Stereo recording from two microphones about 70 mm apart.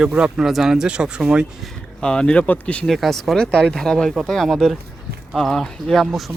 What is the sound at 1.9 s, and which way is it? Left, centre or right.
Speech, centre.